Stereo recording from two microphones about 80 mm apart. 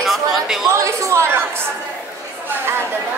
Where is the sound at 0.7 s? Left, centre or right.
Right.